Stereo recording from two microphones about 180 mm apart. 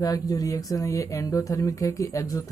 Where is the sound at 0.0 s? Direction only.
20° left (ahead or behind).